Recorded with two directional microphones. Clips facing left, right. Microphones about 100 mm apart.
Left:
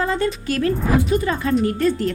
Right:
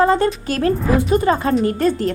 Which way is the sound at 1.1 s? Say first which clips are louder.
Right 4 dB; 35° right (ahead or behind).